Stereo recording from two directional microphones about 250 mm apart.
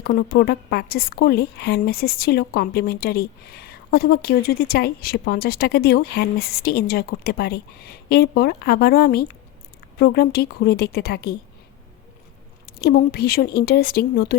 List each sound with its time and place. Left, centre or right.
0.0 s a woman's voice: left
12.6 s a woman's voice: left